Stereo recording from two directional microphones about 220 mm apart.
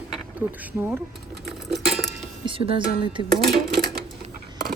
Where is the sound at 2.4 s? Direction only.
25° right (ahead or behind).